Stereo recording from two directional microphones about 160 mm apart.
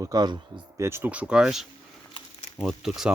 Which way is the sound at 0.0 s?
25° right (ahead or behind).